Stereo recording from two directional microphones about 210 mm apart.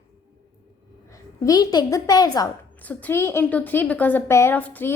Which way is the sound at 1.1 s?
15° left (ahead or behind).